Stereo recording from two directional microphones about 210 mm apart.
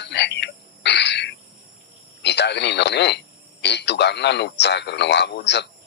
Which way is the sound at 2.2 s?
55° left (ahead or behind).